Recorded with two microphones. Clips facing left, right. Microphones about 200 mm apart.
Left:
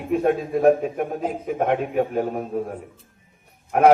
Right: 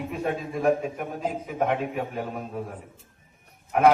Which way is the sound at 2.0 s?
40° left (ahead or behind).